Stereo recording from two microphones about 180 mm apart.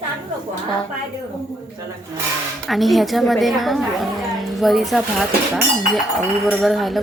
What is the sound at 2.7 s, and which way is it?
Speech, centre (ahead or behind).